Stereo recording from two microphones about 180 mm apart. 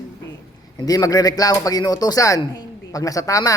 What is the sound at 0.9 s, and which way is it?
Speech, 20° left (ahead or behind).